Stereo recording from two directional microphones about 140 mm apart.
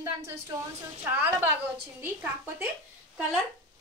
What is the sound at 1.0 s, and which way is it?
A woman's voice, 15° right (ahead or behind).